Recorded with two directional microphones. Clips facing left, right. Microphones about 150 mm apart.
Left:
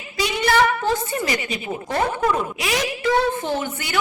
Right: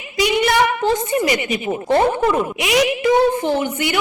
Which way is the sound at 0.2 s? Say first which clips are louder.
Right 3 dB; 15° right (ahead or behind).